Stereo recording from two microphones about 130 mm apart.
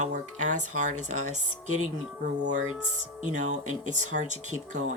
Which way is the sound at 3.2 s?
70° right (ahead or behind).